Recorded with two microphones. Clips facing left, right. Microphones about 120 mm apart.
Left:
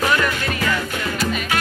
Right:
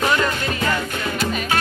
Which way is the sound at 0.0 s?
25° right (ahead or behind).